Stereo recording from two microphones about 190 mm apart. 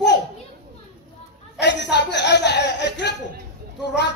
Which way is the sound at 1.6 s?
65° left (ahead or behind).